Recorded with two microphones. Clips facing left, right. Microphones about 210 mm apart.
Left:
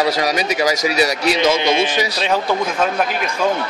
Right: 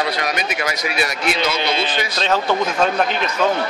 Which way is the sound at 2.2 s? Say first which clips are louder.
Right 2 dB; 10° left (ahead or behind).